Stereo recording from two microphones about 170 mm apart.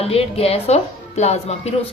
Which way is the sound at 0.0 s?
35° left (ahead or behind).